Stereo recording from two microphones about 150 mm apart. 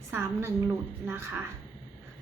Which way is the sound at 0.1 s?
15° right (ahead or behind).